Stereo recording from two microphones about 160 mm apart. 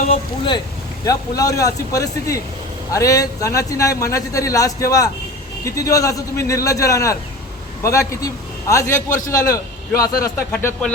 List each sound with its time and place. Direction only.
0.1 s a man's voice: 30° left (ahead or behind)
9.0 s a man's voice: 55° left (ahead or behind)
9.2 s a man's voice: 20° left (ahead or behind)